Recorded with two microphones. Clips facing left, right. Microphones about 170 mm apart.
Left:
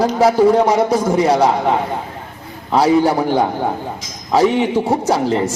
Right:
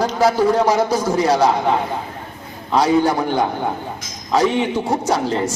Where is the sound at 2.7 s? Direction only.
30° left (ahead or behind).